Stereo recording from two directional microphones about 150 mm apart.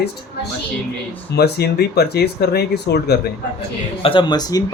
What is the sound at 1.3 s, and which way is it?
Speech, 90° left.